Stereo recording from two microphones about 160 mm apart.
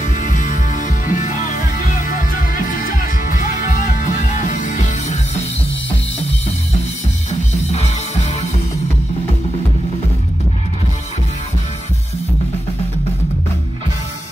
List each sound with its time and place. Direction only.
0.0 s music: 55° left (ahead or behind)
7.2 s music: 40° left (ahead or behind)